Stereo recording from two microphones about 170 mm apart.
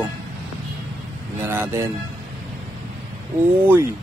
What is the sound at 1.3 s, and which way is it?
Speech, 10° right (ahead or behind).